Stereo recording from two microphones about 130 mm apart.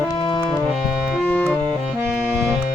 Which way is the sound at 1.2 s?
15° left (ahead or behind).